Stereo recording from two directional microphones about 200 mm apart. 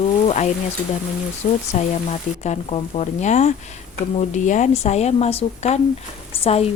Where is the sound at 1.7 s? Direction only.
35° left (ahead or behind).